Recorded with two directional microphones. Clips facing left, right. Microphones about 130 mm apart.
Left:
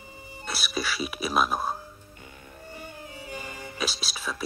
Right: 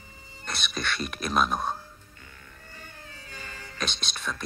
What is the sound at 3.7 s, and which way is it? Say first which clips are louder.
Speech: left 1 dB; 5° left (ahead or behind).